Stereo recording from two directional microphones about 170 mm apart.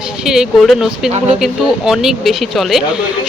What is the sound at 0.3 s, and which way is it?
A woman's voice, centre (ahead or behind).